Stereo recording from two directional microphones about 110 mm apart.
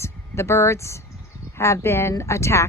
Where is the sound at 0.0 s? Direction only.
25° left (ahead or behind).